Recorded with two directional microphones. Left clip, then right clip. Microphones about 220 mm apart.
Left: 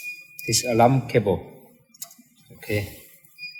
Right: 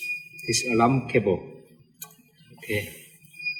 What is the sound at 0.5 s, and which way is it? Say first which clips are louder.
Speech: left 3 dB; 50° left (ahead or behind).